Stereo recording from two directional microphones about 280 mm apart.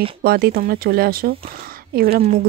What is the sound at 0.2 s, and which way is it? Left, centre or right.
A woman's voice, right.